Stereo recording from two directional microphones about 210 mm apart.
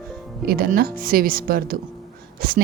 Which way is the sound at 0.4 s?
45° right (ahead or behind).